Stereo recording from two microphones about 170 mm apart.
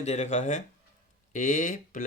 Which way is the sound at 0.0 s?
40° left (ahead or behind).